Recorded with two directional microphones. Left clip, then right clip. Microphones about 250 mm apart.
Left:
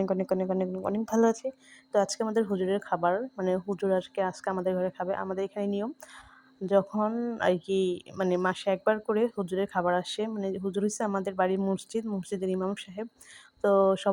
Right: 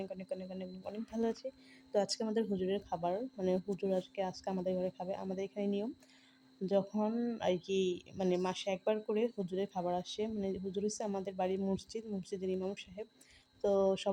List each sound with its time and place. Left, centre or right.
0.0 s speech: left
1.3 s speech: centre
7.1 s a sound: centre
7.3 s speech: centre